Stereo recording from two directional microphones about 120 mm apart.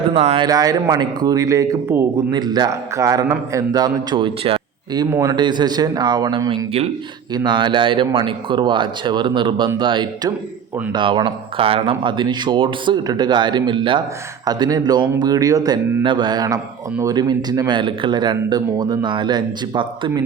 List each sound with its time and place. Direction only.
0.1 s speech: 50° right (ahead or behind)
0.4 s speech: 30° right (ahead or behind); by 4.6 s 45° right (ahead or behind)
4.9 s speech: 30° right (ahead or behind)